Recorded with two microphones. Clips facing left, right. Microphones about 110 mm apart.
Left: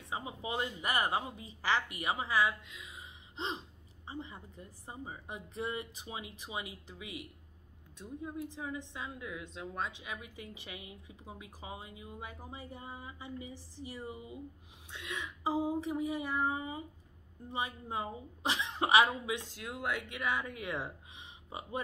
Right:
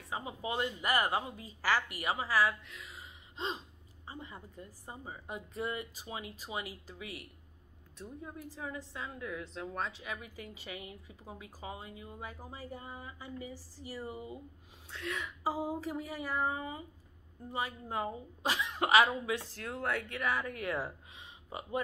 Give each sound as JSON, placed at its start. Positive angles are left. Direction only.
{"t": 0.1, "sound": "speech", "side_deg": 20}
{"t": 14.1, "sound": "speech", "side_deg": -35}
{"t": 14.9, "sound": "speech", "side_deg": 15}